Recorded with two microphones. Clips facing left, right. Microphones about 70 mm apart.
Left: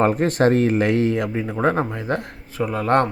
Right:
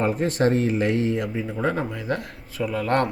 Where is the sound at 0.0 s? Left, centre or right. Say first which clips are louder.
Left 4 dB; left.